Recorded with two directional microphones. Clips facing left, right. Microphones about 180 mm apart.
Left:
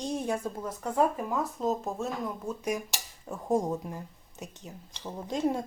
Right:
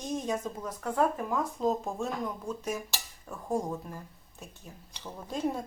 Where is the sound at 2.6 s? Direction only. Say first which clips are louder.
Left 3 dB; 15° left (ahead or behind).